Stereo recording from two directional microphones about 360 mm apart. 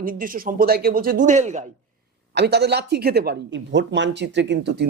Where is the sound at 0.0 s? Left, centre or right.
Right.